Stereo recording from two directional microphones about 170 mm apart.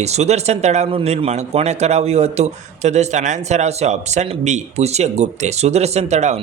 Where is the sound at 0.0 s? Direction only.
40° right (ahead or behind).